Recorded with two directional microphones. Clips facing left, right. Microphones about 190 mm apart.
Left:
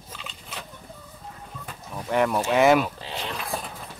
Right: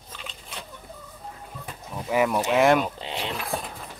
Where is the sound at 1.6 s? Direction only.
5° right (ahead or behind).